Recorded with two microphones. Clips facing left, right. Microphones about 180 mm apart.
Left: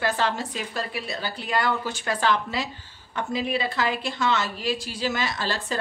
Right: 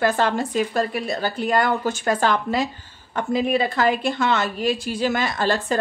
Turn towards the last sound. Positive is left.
turn(degrees=-50)  # may be behind; listen again after turning